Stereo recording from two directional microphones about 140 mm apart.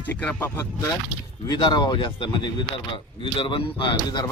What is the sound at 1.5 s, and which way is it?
Speech, 30° left (ahead or behind).